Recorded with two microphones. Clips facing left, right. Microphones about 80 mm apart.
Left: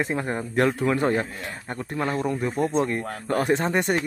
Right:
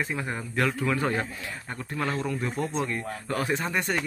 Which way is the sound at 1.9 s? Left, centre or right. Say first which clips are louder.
Left 4 dB; centre.